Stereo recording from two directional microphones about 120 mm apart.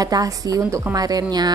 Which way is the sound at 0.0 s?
30° right (ahead or behind).